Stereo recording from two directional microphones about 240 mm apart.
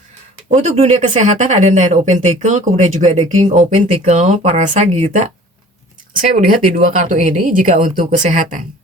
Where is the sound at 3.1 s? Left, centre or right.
Centre.